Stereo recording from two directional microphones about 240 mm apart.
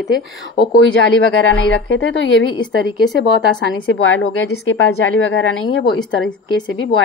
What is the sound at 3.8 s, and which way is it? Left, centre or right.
A woman's voice, left.